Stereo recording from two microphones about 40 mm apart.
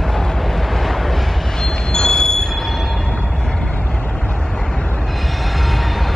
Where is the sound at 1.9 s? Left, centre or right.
Centre.